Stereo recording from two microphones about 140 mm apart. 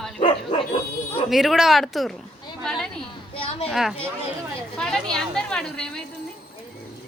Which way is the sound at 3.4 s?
40° left (ahead or behind).